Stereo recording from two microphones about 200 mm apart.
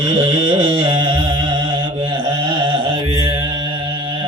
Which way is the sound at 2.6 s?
25° right (ahead or behind).